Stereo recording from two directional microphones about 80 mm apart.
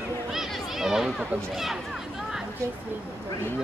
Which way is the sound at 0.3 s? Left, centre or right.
Centre.